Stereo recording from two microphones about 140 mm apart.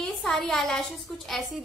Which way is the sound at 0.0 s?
5° left (ahead or behind).